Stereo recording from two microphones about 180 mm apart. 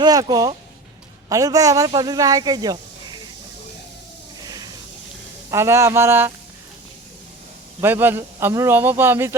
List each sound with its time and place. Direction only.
0.0 s speech: 20° right (ahead or behind)
4.4 s a sound: 20° right (ahead or behind)
5.5 s a man's voice: 15° right (ahead or behind)
7.8 s a man's voice: 10° right (ahead or behind)